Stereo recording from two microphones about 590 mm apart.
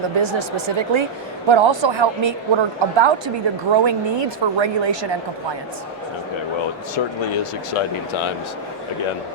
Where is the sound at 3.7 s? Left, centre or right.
Right.